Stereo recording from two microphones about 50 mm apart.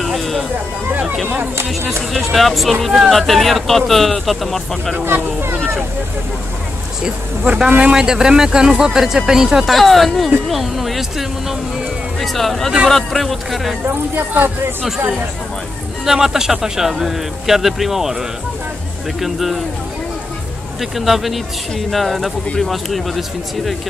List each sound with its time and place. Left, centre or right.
0.0 s a sound: centre
2.1 s speech: centre
4.9 s speech: right
7.4 s speech: right
9.8 s speech: centre
16.1 s speech: centre
19.2 s speech: centre
20.9 s speech: centre